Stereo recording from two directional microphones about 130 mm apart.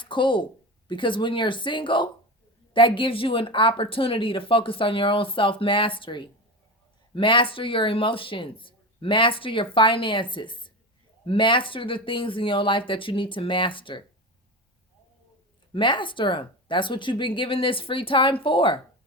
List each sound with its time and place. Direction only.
0.0 s speech: 40° left (ahead or behind)
15.7 s speech: 40° left (ahead or behind)